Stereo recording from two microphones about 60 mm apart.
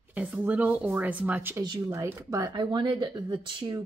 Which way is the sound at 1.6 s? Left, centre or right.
Right.